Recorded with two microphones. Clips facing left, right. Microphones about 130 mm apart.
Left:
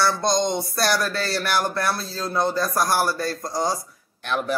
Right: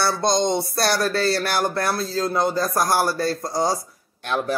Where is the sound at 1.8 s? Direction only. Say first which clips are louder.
Right 3 dB; 50° right (ahead or behind).